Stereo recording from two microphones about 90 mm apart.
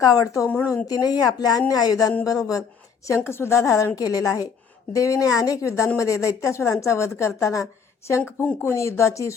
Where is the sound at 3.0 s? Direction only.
30° left (ahead or behind).